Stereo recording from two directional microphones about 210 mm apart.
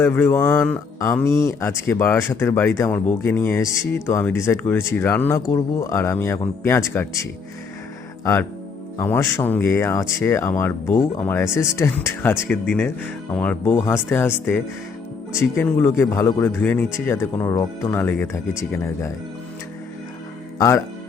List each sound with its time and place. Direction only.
0.0 s speech: 10° left (ahead or behind)
8.2 s speech: 15° left (ahead or behind)
15.3 s speech: 10° left (ahead or behind)
20.6 s speech: 15° left (ahead or behind)